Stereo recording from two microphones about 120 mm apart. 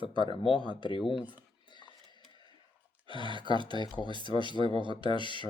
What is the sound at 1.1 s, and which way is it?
Speech, 15° right (ahead or behind).